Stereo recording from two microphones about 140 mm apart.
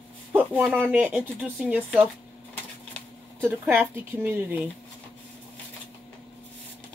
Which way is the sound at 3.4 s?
15° right (ahead or behind).